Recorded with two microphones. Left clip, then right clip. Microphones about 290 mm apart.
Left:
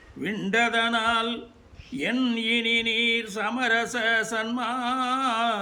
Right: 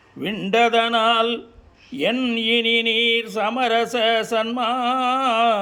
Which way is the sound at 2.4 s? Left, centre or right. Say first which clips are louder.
Right 6 dB; right.